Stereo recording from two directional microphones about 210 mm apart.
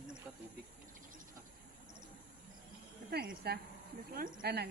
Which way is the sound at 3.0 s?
50° right (ahead or behind).